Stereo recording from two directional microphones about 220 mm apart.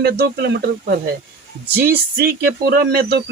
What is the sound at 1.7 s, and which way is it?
Speech, 45° right (ahead or behind).